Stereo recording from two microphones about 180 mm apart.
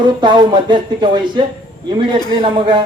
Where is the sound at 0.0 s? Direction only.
25° right (ahead or behind).